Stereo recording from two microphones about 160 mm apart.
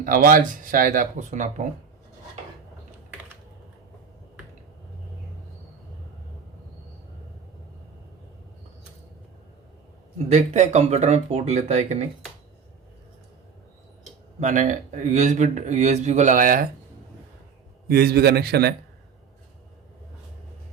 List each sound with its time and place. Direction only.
0.0 s speech: 60° right (ahead or behind)
10.2 s speech: 45° right (ahead or behind)
14.3 s speech: 50° right (ahead or behind)
17.8 s a man's voice: 70° right (ahead or behind)